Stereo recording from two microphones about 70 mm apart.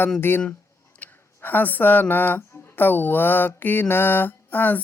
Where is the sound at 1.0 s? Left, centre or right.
Left.